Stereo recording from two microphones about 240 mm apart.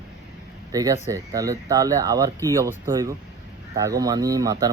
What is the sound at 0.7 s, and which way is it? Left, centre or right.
Speech, centre.